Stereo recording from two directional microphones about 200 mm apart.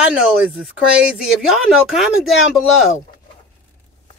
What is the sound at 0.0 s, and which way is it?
Speech, 5° right (ahead or behind).